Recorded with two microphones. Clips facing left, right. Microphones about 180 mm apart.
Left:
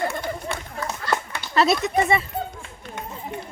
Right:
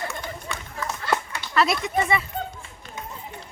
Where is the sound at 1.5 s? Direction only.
25° left (ahead or behind).